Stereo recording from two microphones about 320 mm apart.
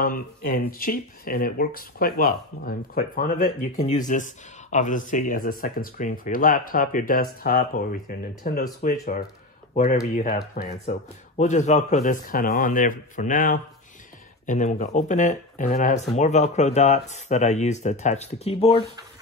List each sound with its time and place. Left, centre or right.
0.0 s speech: left
10.1 s speech: left